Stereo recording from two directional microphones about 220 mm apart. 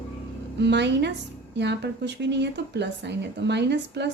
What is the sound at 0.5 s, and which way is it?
Speech, 50° right (ahead or behind).